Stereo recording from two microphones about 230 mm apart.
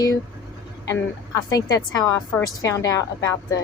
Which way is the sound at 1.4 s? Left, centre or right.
Centre.